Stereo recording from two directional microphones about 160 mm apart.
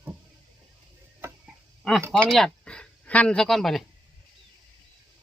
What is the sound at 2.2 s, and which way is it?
Speech, centre (ahead or behind).